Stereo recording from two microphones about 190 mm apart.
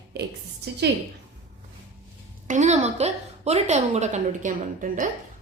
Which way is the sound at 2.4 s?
40° right (ahead or behind).